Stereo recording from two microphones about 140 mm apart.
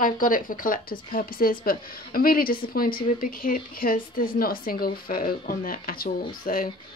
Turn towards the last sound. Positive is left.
turn(degrees=90)